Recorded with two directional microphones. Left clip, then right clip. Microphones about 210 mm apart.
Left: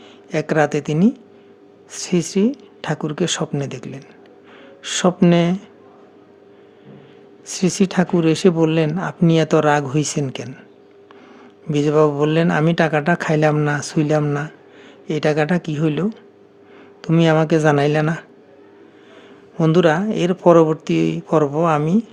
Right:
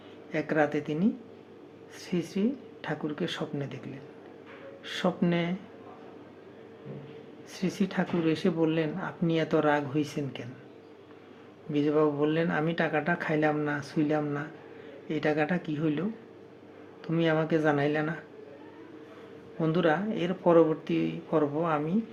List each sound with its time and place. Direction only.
0.3 s speech: 50° left (ahead or behind)
7.4 s speech: 50° left (ahead or behind)
11.7 s speech: 50° left (ahead or behind)
19.5 s speech: 50° left (ahead or behind)